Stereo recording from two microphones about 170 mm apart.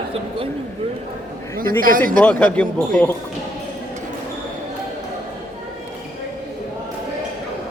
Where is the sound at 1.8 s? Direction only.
55° right (ahead or behind).